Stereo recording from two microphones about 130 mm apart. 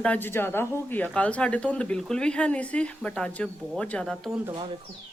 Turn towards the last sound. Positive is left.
turn(degrees=-40)  # may be behind; listen again after turning